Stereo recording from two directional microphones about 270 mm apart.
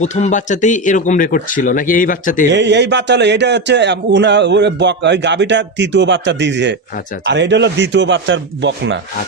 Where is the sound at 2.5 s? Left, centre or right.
Right.